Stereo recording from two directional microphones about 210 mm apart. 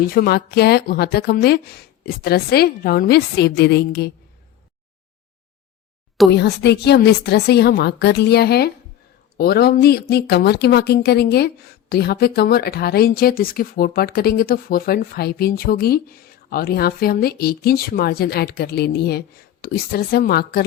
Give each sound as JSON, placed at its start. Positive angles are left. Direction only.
{"t": 0.1, "sound": "a woman's voice", "side_deg": 45}
{"t": 6.3, "sound": "a woman's voice", "side_deg": 55}